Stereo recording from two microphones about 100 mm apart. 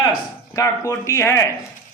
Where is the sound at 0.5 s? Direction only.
30° left (ahead or behind).